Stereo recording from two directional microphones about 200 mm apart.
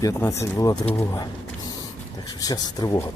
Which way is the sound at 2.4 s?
20° left (ahead or behind).